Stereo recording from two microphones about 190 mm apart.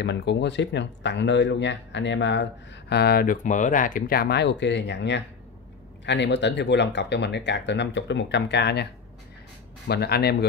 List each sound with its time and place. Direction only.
0.0 s speech: 65° left (ahead or behind)
9.8 s speech: 60° left (ahead or behind)